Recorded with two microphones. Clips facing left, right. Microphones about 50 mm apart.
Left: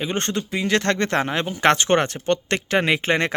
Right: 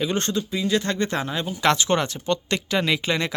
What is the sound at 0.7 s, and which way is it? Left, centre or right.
Speech, left.